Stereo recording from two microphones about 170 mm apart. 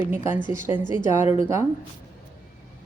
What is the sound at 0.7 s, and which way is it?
Speech, 15° right (ahead or behind).